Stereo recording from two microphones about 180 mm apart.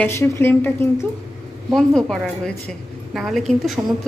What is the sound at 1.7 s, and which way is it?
A woman's voice, centre (ahead or behind).